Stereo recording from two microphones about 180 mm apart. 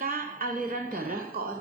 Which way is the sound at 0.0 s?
55° right (ahead or behind).